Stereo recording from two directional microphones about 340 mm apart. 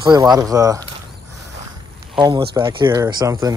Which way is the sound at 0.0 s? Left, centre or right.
Centre.